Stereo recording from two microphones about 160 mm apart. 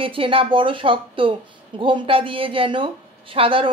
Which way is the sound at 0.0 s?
35° right (ahead or behind).